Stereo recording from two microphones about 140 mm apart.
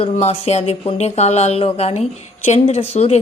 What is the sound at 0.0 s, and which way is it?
Speech, 50° left (ahead or behind).